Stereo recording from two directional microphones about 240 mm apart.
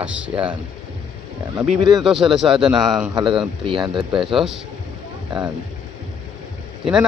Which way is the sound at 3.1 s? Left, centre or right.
Centre.